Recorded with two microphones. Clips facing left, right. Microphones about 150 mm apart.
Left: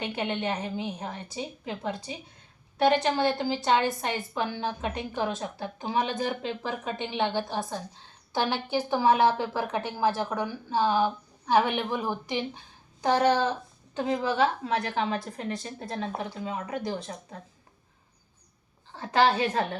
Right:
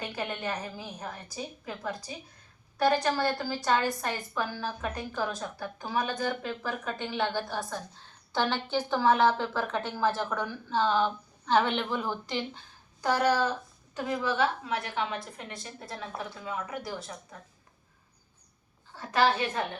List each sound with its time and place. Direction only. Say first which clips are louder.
0.0 s a woman's voice: left 4 dB; 25° left (ahead or behind)
18.9 s a woman's voice: left 3 dB; 30° left (ahead or behind)